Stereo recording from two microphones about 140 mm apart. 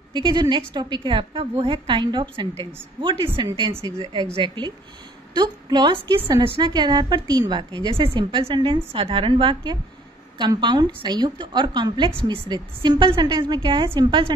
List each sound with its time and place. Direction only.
0.1 s a woman's voice: 30° right (ahead or behind)